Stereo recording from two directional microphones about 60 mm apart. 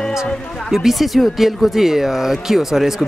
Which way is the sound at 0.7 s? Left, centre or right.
Centre.